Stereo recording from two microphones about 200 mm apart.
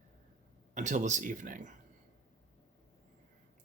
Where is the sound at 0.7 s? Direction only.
35° right (ahead or behind).